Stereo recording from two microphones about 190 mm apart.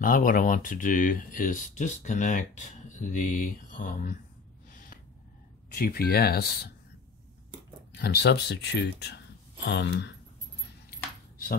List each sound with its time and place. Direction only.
0.0 s speech: 45° left (ahead or behind)
5.8 s speech: 50° left (ahead or behind)
7.9 s speech: 60° left (ahead or behind)